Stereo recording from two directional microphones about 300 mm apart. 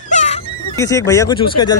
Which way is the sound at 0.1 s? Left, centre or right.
Left.